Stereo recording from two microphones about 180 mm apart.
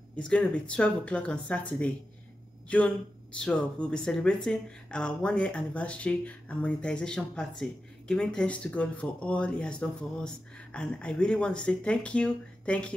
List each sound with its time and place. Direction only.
0.1 s speech: 5° left (ahead or behind)